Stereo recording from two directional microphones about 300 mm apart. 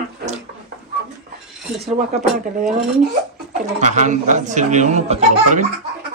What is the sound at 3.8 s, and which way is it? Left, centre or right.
Speech, right.